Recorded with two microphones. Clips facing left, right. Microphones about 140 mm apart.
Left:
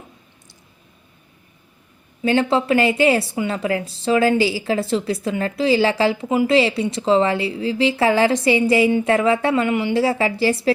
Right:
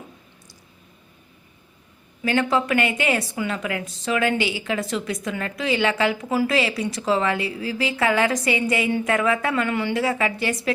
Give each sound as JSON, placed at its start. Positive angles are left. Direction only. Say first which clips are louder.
{"t": 2.2, "sound": "a woman's voice", "louder": "left 4 dB", "side_deg": 30}